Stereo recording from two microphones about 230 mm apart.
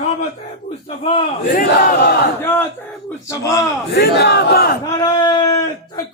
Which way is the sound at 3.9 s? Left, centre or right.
Left.